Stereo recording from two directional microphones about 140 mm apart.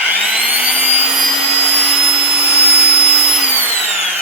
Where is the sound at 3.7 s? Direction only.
10° right (ahead or behind).